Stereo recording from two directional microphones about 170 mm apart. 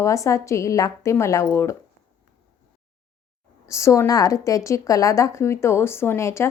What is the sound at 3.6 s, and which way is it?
A woman's voice, 15° left (ahead or behind).